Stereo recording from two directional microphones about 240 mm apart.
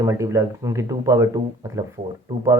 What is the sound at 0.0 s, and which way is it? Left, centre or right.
Speech, centre.